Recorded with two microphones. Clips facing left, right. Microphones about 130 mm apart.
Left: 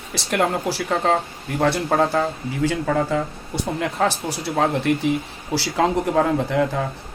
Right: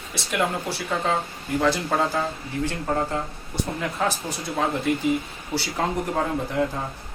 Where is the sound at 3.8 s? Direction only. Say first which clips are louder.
Left 5 dB; 80° left.